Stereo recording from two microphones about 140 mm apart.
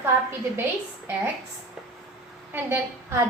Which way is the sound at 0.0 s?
15° right (ahead or behind).